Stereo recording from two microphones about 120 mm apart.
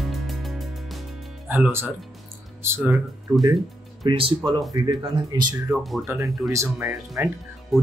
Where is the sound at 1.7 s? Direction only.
20° right (ahead or behind).